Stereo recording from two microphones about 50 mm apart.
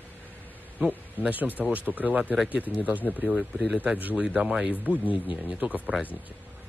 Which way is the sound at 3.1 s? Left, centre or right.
Centre.